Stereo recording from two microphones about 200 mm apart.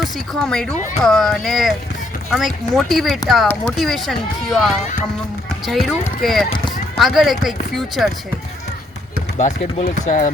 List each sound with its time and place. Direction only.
0.0 s speech: 5° left (ahead or behind)
9.4 s speech: 35° left (ahead or behind)